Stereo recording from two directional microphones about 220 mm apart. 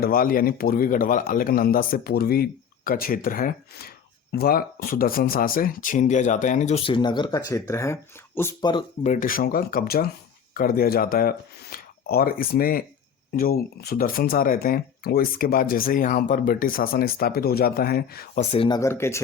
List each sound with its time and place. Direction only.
0.0 s speech: 40° left (ahead or behind); by 8.8 s 15° left (ahead or behind)
9.0 s speech: 35° left (ahead or behind)
18.5 s speech: 25° left (ahead or behind)
18.8 s speech: 10° left (ahead or behind)